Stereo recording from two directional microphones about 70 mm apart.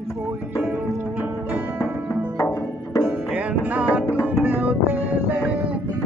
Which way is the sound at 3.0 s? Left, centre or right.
Right.